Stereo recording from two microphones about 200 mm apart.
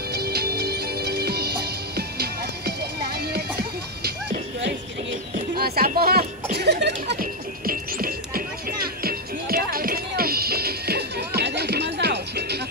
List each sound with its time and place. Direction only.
0.1 s music: 50° right (ahead or behind)